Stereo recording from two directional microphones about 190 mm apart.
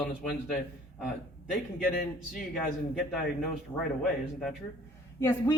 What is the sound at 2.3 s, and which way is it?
Speech, centre (ahead or behind).